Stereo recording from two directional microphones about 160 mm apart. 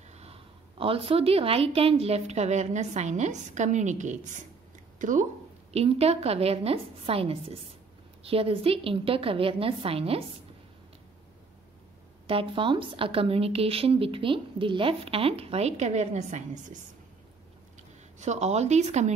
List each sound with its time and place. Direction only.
0.1 s a woman's voice: 40° right (ahead or behind)
4.9 s a sound: 55° right (ahead or behind)
5.7 s a woman's voice: 40° right (ahead or behind)
12.3 s a woman's voice: 35° right (ahead or behind); by 16.8 s 50° right (ahead or behind)
18.2 s a woman's voice: 45° right (ahead or behind)